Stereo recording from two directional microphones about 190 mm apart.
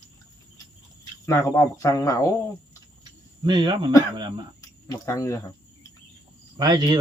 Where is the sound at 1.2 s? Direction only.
15° left (ahead or behind).